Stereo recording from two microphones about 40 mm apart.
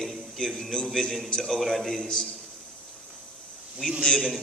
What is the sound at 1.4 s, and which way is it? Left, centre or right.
Speech, centre.